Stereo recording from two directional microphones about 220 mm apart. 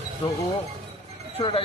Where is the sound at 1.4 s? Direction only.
25° left (ahead or behind).